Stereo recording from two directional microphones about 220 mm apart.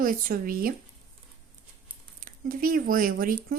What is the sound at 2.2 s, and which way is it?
Speech, 40° right (ahead or behind).